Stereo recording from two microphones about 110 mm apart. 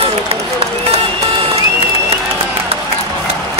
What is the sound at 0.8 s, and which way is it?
Music, 70° right (ahead or behind).